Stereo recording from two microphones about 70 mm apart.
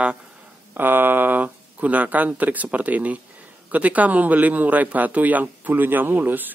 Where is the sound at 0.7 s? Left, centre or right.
Right.